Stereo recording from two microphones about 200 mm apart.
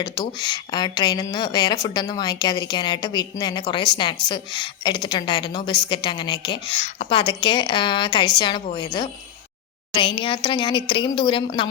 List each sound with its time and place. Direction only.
0.0 s a woman's voice: 20° left (ahead or behind)